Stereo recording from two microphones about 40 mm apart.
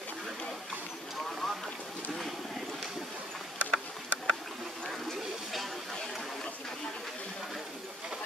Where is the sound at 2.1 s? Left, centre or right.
Centre.